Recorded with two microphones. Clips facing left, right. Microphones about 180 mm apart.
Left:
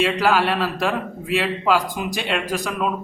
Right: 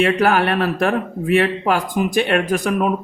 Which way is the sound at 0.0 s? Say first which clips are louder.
Right 3 dB; 55° right (ahead or behind).